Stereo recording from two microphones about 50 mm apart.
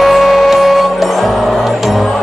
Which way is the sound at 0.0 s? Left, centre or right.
Centre.